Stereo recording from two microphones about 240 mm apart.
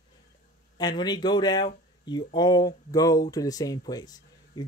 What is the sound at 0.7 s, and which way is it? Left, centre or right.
Speech, centre.